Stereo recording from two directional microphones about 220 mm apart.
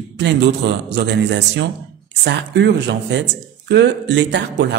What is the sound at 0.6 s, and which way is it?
Speech, 55° right (ahead or behind).